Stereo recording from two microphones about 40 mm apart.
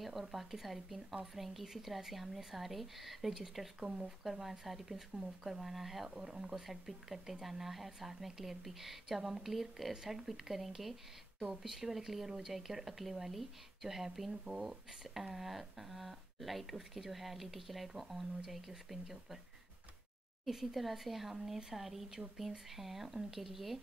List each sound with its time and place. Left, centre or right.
0.2 s speech: centre
3.8 s speech: right
4.2 s speech: centre
6.0 s speech: centre
20.4 s speech: centre